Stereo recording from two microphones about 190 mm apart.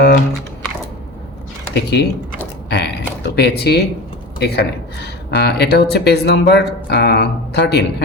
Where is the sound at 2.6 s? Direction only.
60° left (ahead or behind).